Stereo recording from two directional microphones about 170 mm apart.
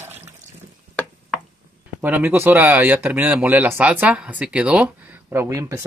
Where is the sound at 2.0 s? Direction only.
10° right (ahead or behind).